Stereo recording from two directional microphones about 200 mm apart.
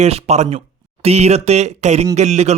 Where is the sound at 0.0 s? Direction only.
30° right (ahead or behind).